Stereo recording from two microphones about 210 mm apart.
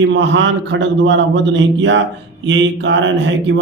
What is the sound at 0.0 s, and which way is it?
A man's voice, 65° right (ahead or behind).